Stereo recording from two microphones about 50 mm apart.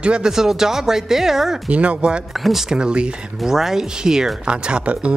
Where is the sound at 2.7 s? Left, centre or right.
Centre.